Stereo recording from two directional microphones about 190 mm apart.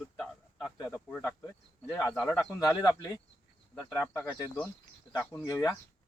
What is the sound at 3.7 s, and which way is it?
Speech, centre (ahead or behind).